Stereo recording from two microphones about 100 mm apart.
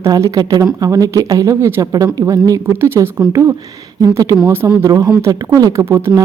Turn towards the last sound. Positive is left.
turn(degrees=-25)  # may be behind; listen again after turning